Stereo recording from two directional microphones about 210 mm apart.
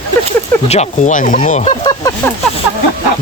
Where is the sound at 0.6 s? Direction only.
30° left (ahead or behind).